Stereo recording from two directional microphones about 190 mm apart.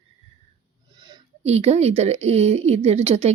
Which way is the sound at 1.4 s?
35° right (ahead or behind).